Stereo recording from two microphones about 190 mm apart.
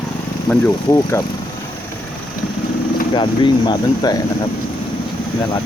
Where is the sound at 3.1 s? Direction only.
25° left (ahead or behind).